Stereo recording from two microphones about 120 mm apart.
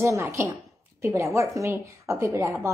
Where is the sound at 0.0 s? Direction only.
20° right (ahead or behind).